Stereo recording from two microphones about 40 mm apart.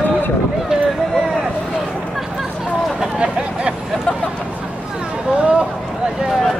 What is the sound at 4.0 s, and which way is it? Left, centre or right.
Vehicle, left.